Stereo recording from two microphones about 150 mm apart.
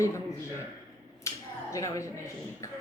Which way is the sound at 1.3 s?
20° left (ahead or behind).